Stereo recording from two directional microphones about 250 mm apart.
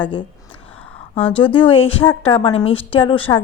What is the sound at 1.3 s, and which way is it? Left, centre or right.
A woman's voice, centre.